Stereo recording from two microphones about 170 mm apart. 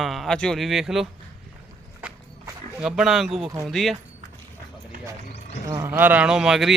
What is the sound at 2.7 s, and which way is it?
Speech, 5° right (ahead or behind).